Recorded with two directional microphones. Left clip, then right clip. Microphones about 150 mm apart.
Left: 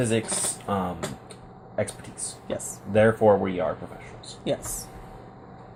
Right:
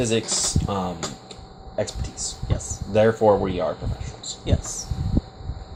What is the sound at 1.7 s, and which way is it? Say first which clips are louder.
Speech: right 2 dB; 60° right (ahead or behind).